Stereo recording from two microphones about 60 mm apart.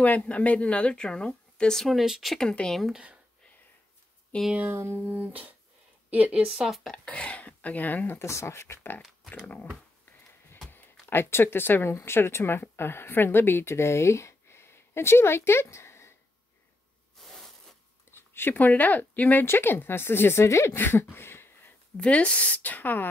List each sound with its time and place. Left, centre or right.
0.0 s speech: left
1.8 s speech: centre
2.9 s speech: centre
4.3 s speech: left
4.6 s a woman's voice: right
6.6 s speech: centre
7.1 s speech: left
8.2 s speech: left
10.7 s speech: left
17.2 s a sound: centre
18.1 s speech: left
20.4 s speech: left
20.7 s a sound: left
21.9 s speech: centre